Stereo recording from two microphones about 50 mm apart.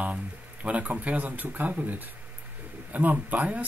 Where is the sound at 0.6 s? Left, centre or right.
Right.